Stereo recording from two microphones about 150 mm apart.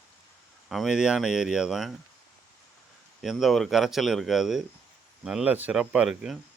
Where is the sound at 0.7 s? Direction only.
Centre (ahead or behind).